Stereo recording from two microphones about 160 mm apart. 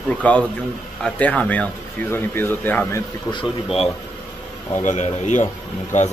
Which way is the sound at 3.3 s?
35° left (ahead or behind).